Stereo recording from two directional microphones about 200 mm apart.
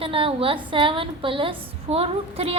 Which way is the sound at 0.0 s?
25° right (ahead or behind).